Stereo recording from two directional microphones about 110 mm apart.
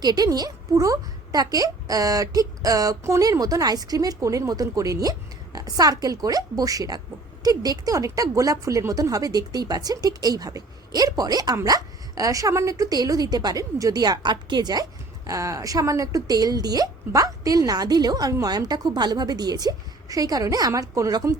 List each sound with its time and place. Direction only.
0.0 s speech: 35° right (ahead or behind)